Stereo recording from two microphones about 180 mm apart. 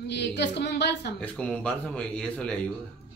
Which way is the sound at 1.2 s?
5° left (ahead or behind).